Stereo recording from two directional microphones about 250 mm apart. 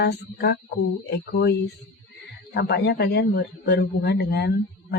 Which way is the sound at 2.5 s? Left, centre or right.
Left.